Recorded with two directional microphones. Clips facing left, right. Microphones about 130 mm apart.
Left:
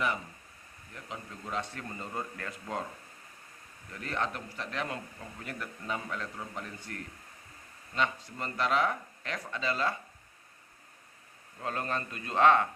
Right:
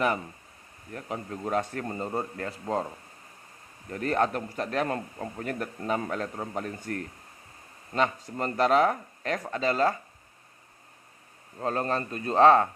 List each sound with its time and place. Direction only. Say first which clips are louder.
0.9 s a man's voice: right 8 dB; 45° right (ahead or behind)
3.8 s a man's voice: right 9 dB; 45° right (ahead or behind)
11.6 s speech: right 6 dB; 35° right (ahead or behind)